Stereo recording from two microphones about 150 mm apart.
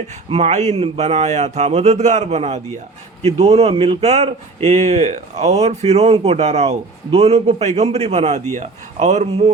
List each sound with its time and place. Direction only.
0.3 s speech: 45° right (ahead or behind)